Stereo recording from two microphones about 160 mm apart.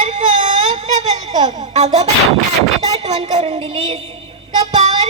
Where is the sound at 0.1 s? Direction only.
50° right (ahead or behind).